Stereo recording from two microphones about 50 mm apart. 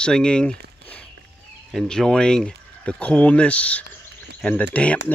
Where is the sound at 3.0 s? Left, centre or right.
Left.